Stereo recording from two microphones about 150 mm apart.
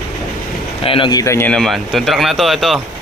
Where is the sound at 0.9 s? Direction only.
35° left (ahead or behind).